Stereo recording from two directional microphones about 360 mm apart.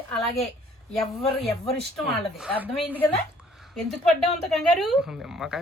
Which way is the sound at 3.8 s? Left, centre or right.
Centre.